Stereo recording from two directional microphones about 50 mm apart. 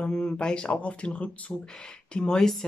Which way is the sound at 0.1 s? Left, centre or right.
Centre.